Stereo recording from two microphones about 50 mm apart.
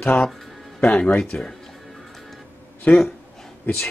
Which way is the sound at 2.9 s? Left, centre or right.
Left.